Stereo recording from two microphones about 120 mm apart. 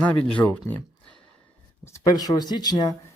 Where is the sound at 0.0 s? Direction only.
10° left (ahead or behind).